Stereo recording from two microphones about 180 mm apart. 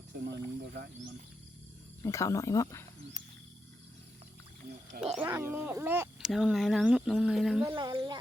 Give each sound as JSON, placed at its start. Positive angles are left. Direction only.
{"t": 0.3, "sound": "speech", "side_deg": -65}
{"t": 2.0, "sound": "speech", "side_deg": 15}
{"t": 5.1, "sound": "speech", "side_deg": -10}
{"t": 6.1, "sound": "speech", "side_deg": 0}
{"t": 7.7, "sound": "speech", "side_deg": -25}